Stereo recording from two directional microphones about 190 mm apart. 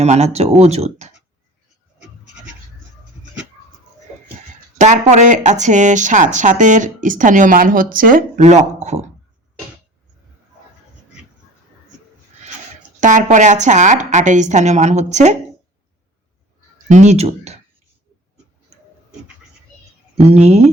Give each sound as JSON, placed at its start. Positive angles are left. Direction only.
{"t": 0.0, "sound": "speech", "side_deg": -35}
{"t": 4.8, "sound": "speech", "side_deg": -40}
{"t": 13.0, "sound": "speech", "side_deg": -40}
{"t": 16.9, "sound": "speech", "side_deg": -40}
{"t": 20.1, "sound": "speech", "side_deg": -35}